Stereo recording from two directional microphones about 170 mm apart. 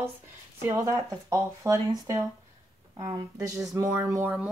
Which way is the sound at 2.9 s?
20° right (ahead or behind).